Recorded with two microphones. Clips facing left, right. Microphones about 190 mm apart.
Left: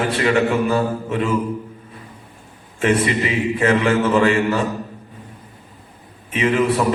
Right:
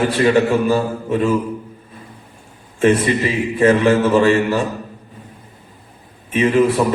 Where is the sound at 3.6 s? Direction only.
35° right (ahead or behind).